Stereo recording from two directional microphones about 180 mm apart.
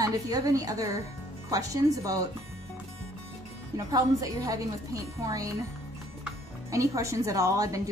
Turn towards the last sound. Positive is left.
turn(degrees=-15)  # may be behind; listen again after turning